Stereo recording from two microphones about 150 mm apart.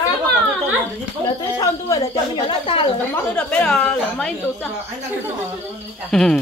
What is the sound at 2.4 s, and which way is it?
Speech, 35° left (ahead or behind).